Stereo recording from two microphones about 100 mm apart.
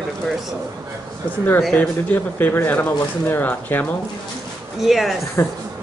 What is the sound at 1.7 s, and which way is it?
Speech, 20° left (ahead or behind).